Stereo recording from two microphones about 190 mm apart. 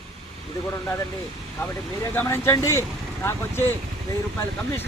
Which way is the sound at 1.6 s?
10° left (ahead or behind).